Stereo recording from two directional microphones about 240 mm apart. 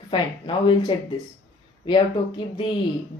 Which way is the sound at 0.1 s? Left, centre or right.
Centre.